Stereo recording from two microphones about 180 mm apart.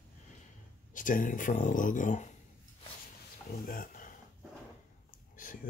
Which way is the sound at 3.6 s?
50° left (ahead or behind).